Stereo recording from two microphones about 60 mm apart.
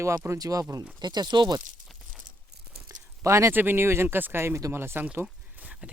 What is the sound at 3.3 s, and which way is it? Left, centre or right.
Speech, right.